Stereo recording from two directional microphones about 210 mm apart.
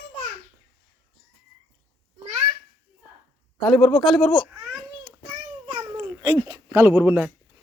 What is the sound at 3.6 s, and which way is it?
Speech, centre (ahead or behind).